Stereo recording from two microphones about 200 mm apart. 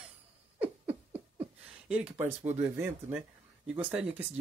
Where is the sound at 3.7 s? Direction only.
5° right (ahead or behind).